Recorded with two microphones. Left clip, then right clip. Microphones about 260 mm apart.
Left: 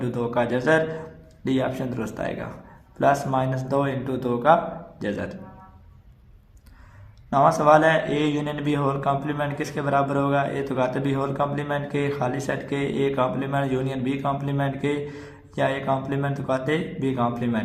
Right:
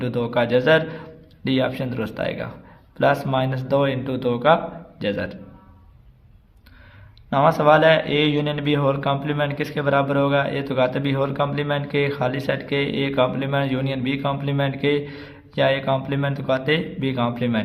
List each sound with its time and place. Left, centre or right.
0.3 s speech: right
7.3 s speech: right